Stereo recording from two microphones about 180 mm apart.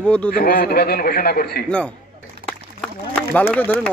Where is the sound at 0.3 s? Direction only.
55° left (ahead or behind).